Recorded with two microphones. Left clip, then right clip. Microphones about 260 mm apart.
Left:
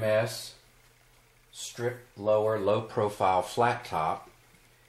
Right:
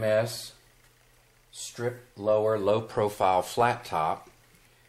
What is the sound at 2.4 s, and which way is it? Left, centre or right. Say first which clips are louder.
Speech: right 2 dB; centre.